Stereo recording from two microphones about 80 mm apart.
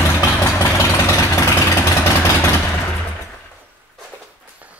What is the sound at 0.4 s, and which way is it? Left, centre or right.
Vehicle, left.